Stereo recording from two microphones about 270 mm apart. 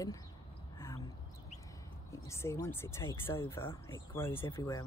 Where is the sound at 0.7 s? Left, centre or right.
Centre.